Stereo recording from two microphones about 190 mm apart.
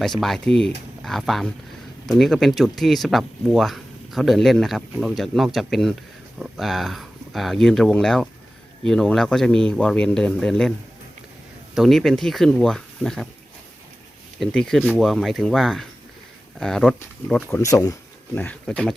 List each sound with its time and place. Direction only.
0.0 s speech: centre (ahead or behind)
14.3 s speech: 5° left (ahead or behind)
17.5 s speech: 15° left (ahead or behind)